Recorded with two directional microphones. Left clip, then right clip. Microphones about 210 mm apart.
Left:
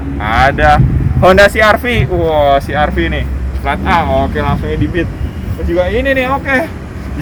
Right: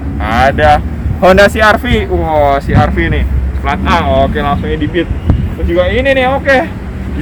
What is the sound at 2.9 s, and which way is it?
Speech, 55° left (ahead or behind).